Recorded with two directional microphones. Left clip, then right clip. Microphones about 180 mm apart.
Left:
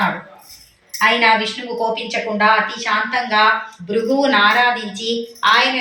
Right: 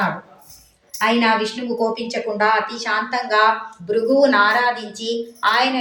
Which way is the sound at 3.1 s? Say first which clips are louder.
Left 1 dB; 20° right (ahead or behind).